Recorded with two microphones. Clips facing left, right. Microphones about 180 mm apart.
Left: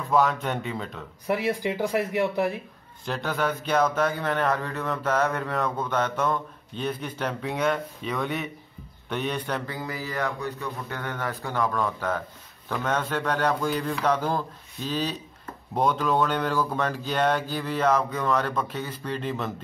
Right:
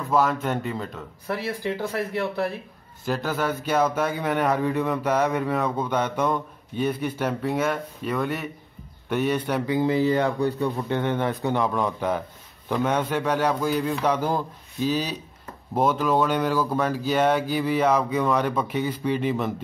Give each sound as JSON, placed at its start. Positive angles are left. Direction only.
{"t": 0.1, "sound": "speech", "side_deg": 0}
{"t": 1.2, "sound": "speech", "side_deg": 15}
{"t": 3.1, "sound": "speech", "side_deg": -5}
{"t": 9.8, "sound": "speech", "side_deg": -25}